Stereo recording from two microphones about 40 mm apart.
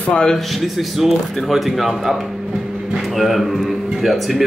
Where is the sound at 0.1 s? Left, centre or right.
Centre.